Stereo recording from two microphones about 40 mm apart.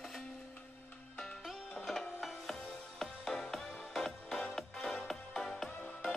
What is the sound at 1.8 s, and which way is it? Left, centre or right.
Music, centre.